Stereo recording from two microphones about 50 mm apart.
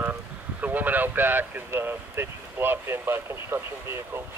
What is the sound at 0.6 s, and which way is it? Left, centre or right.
Speech, right.